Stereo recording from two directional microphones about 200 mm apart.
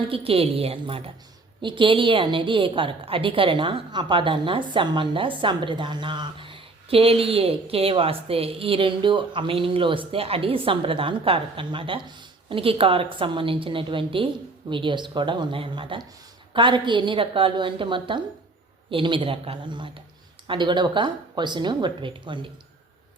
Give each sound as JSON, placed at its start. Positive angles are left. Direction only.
{"t": 0.1, "sound": "a woman's voice", "side_deg": -30}